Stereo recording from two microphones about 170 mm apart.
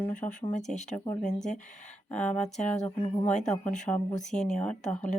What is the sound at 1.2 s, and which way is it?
Speech, 45° left (ahead or behind).